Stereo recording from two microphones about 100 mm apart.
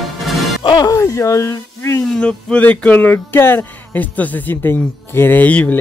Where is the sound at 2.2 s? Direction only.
10° left (ahead or behind).